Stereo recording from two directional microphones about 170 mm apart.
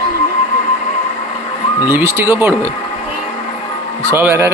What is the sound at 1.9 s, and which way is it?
Speech, 15° right (ahead or behind).